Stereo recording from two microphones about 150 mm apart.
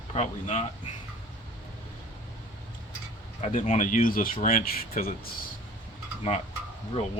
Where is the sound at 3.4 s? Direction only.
55° left (ahead or behind); by 5.3 s 80° left.